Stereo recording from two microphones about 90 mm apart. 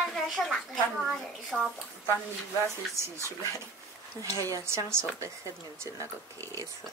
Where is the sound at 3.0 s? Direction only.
30° right (ahead or behind).